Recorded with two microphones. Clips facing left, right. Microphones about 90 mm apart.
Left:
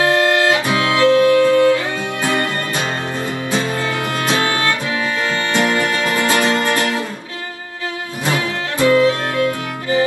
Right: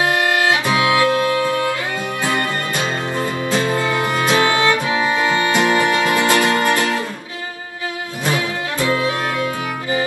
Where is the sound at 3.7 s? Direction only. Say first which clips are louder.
Right 2 dB; 20° right (ahead or behind).